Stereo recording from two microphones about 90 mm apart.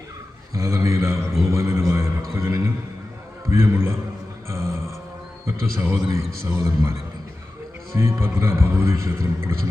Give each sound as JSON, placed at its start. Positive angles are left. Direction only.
{"t": 0.5, "sound": "a sound", "side_deg": -35}
{"t": 3.5, "sound": "a man's voice", "side_deg": -30}
{"t": 4.4, "sound": "music", "side_deg": -30}
{"t": 5.7, "sound": "a man's voice", "side_deg": -35}
{"t": 7.9, "sound": "a man's voice", "side_deg": -30}